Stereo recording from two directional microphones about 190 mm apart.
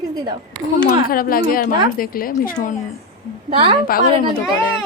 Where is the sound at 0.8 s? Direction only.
50° left (ahead or behind).